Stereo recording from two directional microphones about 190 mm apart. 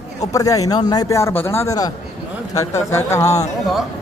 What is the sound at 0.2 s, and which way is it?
A man's voice, 15° left (ahead or behind).